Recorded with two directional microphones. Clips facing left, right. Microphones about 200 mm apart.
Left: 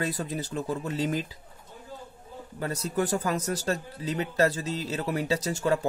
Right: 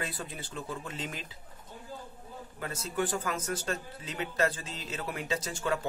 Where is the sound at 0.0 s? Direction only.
40° left (ahead or behind).